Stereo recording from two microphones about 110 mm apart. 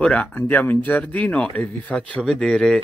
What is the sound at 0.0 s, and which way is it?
Speech, 10° left (ahead or behind).